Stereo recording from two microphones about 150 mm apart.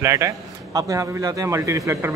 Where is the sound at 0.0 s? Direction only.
20° right (ahead or behind).